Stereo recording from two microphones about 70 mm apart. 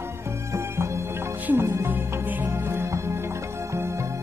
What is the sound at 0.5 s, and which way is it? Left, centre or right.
Music, right.